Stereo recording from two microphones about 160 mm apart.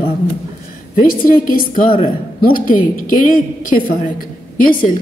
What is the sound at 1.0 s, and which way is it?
A woman's voice, 65° left (ahead or behind).